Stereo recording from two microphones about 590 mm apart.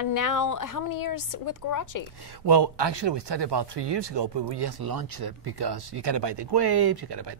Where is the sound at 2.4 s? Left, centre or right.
Right.